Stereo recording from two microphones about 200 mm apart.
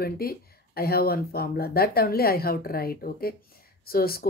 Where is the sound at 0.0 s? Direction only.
50° left (ahead or behind).